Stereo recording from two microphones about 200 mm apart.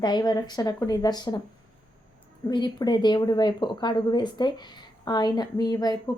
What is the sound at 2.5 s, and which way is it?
A woman's voice, 20° left (ahead or behind).